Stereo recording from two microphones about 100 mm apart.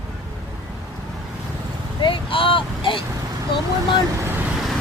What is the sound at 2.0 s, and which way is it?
Speech, 60° left (ahead or behind).